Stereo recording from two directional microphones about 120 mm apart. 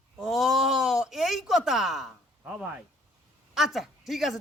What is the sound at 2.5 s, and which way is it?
A woman's voice, 10° right (ahead or behind).